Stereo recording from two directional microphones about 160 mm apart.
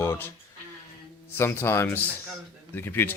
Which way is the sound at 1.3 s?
15° left (ahead or behind).